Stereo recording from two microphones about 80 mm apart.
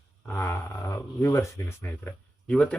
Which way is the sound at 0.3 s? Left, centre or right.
Left.